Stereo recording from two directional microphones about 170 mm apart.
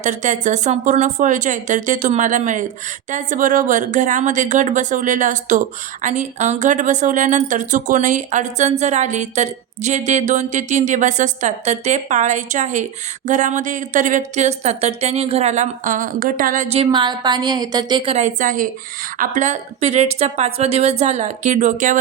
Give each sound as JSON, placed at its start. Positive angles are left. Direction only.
{"t": 0.0, "sound": "speech", "side_deg": -45}
{"t": 16.6, "sound": "a woman's voice", "side_deg": -35}
{"t": 18.3, "sound": "a woman's voice", "side_deg": -50}